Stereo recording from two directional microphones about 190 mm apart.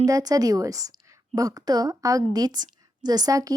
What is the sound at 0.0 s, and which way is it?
Speech, 20° right (ahead or behind).